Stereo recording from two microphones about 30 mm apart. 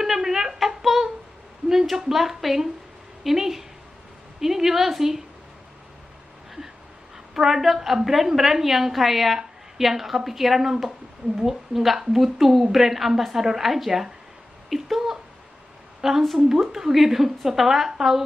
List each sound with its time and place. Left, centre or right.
0.0 s a sound: centre
1.7 s a woman's voice: centre
7.3 s a woman's voice: centre
16.0 s a woman's voice: centre
16.3 s a woman's voice: centre